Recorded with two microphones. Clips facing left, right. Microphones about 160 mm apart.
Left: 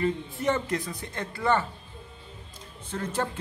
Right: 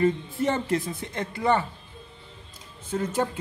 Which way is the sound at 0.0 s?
30° right (ahead or behind).